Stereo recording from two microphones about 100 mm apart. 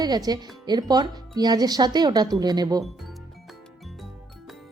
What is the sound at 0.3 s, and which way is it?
Speech, 45° right (ahead or behind).